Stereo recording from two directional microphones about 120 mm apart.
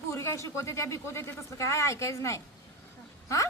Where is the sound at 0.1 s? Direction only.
25° left (ahead or behind).